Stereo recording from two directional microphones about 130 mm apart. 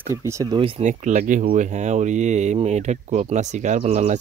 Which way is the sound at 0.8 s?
70° right (ahead or behind).